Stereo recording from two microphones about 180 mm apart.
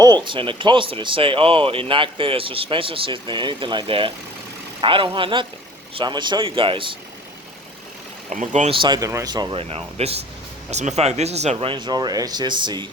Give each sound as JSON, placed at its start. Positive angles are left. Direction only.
{"t": 0.0, "sound": "speech", "side_deg": -25}
{"t": 8.3, "sound": "speech", "side_deg": -40}